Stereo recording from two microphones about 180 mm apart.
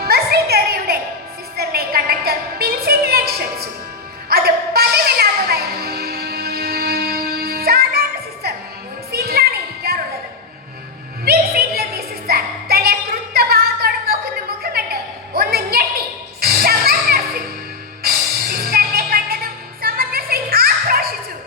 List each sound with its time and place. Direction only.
0.1 s music: 60° right (ahead or behind)
11.3 s music: 60° right (ahead or behind)
14.6 s a sound: 60° right (ahead or behind)
15.4 s music: 60° right (ahead or behind)
18.6 s music: 60° right (ahead or behind)